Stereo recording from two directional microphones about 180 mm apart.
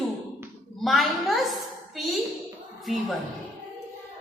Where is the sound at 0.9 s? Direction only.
Centre (ahead or behind).